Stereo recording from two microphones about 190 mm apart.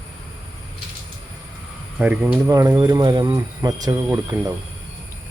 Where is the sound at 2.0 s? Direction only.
10° right (ahead or behind).